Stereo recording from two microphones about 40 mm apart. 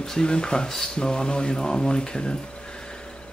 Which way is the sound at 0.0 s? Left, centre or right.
Centre.